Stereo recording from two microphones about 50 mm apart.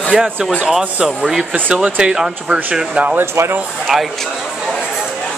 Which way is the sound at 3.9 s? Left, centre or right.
Centre.